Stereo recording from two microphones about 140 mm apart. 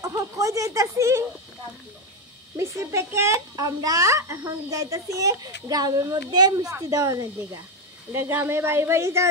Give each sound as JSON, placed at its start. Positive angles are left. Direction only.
{"t": 0.0, "sound": "a child's voice", "side_deg": -25}
{"t": 2.5, "sound": "a child's voice", "side_deg": -20}